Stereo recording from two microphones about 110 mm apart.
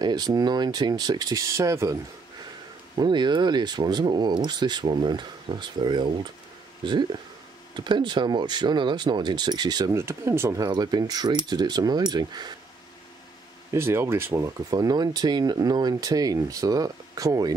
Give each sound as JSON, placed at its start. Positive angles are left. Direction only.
{"t": 0.0, "sound": "speech", "side_deg": -40}
{"t": 3.0, "sound": "speech", "side_deg": -45}
{"t": 9.9, "sound": "speech", "side_deg": -25}
{"t": 10.6, "sound": "speech", "side_deg": -35}
{"t": 13.7, "sound": "speech", "side_deg": -20}